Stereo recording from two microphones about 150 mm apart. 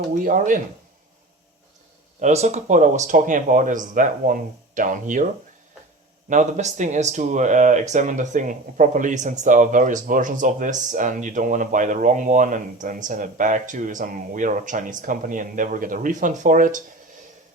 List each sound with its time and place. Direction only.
0.1 s speech: 65° right (ahead or behind)
2.2 s speech: 50° right (ahead or behind)